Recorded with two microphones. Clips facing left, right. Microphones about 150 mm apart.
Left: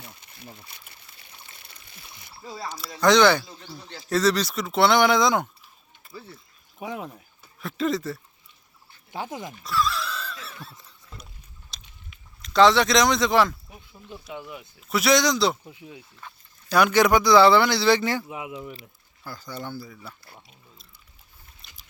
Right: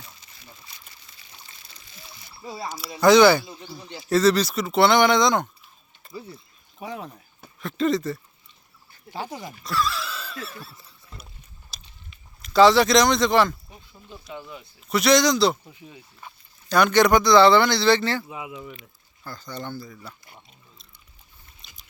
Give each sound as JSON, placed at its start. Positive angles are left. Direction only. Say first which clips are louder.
{"t": 0.0, "sound": "trickle", "louder": "left 4 dB", "side_deg": 60}
{"t": 2.4, "sound": "speech", "louder": "right 2 dB", "side_deg": -15}
{"t": 2.6, "sound": "speech", "louder": "right 3 dB", "side_deg": -5}
{"t": 6.7, "sound": "speech", "louder": "left 1 dB", "side_deg": 10}
{"t": 9.1, "sound": "speech", "louder": "even", "side_deg": 20}
{"t": 9.4, "sound": "a sound", "louder": "even", "side_deg": 0}
{"t": 12.4, "sound": "speech", "louder": "right 2 dB", "side_deg": -5}
{"t": 15.6, "sound": "speech", "louder": "left 2 dB", "side_deg": 10}
{"t": 21.6, "sound": "a sound", "louder": "even", "side_deg": 5}